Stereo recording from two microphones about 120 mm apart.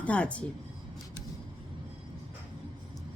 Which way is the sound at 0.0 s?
10° left (ahead or behind).